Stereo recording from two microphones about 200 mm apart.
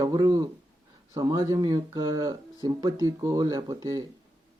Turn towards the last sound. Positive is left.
turn(degrees=-15)  # may be behind; listen again after turning